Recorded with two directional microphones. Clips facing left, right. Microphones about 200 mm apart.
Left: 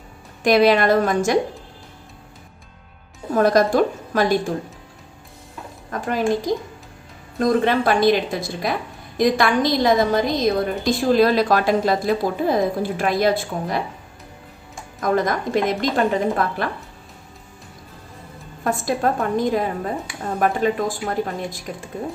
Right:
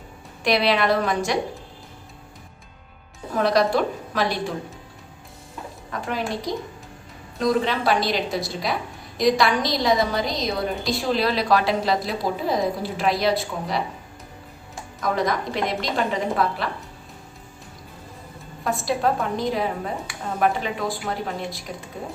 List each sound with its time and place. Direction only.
0.4 s a woman's voice: 45° left (ahead or behind)
3.3 s a woman's voice: 45° left (ahead or behind)
5.9 s a woman's voice: 45° left (ahead or behind)
15.0 s a woman's voice: 50° left (ahead or behind)
18.6 s a woman's voice: 50° left (ahead or behind)